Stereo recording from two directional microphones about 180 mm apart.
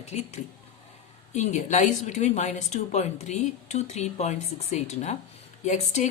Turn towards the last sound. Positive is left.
turn(degrees=40)  # may be behind; listen again after turning